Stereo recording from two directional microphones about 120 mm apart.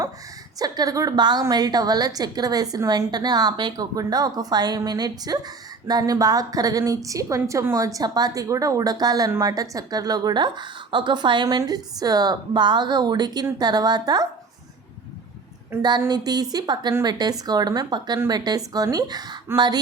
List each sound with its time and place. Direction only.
0.6 s a woman's voice: 30° right (ahead or behind)
15.7 s a woman's voice: 20° right (ahead or behind)
16.0 s a woman's voice: 35° right (ahead or behind)